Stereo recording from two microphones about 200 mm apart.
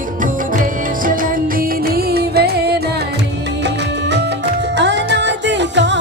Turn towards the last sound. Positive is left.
turn(degrees=-60)  # may be behind; listen again after turning